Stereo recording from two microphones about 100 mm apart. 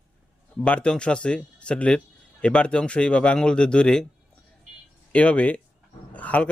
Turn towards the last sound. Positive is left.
turn(degrees=15)  # may be behind; listen again after turning